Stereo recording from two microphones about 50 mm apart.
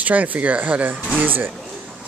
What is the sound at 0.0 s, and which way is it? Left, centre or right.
Speech, right.